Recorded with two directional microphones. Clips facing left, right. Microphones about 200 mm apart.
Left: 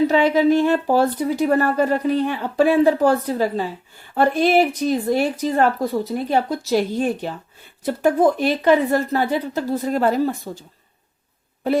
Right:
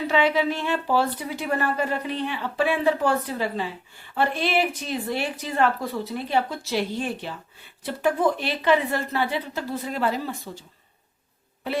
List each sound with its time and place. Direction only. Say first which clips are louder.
0.1 s a woman's voice: left 7 dB; 40° left (ahead or behind)